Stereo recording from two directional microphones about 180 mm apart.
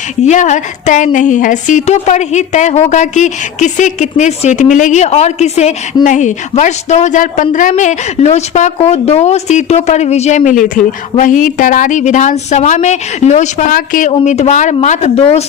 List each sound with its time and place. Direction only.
0.2 s a woman's voice: 40° left (ahead or behind)
14.1 s a woman's voice: 40° left (ahead or behind)